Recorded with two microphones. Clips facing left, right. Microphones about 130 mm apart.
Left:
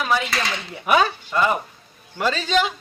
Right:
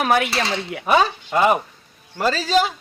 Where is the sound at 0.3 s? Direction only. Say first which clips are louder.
Right 3 dB; 30° right (ahead or behind).